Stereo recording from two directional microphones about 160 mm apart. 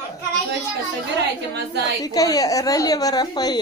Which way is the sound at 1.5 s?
90° right.